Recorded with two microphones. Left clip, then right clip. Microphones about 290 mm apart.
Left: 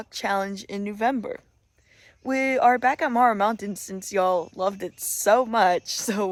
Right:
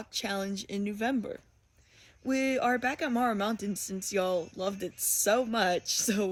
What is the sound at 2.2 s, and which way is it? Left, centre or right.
Speech, centre.